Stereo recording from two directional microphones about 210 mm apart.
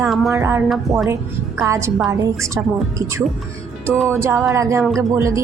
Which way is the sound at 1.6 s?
15° right (ahead or behind).